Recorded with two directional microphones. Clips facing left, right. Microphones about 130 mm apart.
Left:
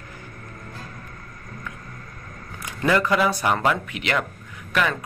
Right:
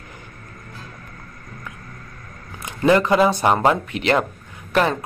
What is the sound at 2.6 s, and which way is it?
Speech, 25° right (ahead or behind).